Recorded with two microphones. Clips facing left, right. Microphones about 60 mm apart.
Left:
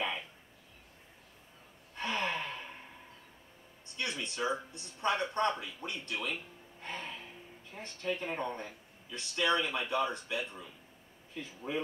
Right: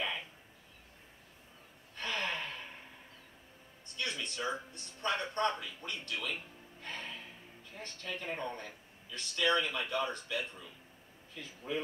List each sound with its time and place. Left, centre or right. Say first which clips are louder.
2.0 s gasp: left 2 dB; left
3.9 s a sound: left 1 dB; left
5.2 s speech: left 2 dB; left
6.8 s music: left 2 dB; left
7.7 s speech: left 6 dB; left